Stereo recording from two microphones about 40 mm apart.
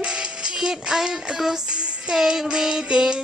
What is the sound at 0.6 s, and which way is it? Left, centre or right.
Music, centre.